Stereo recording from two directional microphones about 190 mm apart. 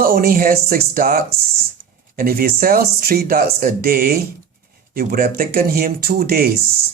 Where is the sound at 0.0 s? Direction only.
50° right (ahead or behind).